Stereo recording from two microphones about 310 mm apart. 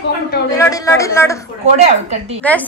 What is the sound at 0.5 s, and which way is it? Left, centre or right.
Speech, centre.